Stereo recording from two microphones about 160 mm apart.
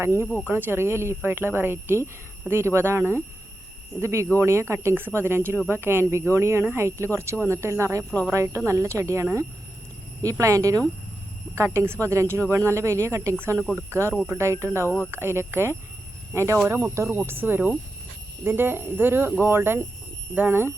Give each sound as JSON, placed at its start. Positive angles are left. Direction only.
{"t": 0.0, "sound": "speech", "side_deg": -15}
{"t": 14.8, "sound": "speech", "side_deg": 15}
{"t": 15.1, "sound": "speech", "side_deg": -15}